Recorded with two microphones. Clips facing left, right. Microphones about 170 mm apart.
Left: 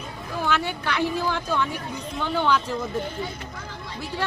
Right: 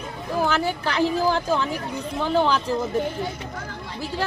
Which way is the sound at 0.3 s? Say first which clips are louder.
Right 3 dB; 35° right (ahead or behind).